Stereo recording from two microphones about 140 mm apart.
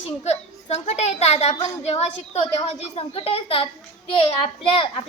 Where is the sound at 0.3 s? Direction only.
50° left (ahead or behind).